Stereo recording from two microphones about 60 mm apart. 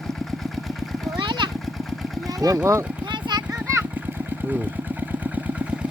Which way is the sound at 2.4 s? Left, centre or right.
Right.